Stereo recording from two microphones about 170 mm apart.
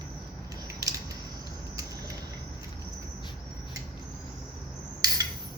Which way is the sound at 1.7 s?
20° right (ahead or behind).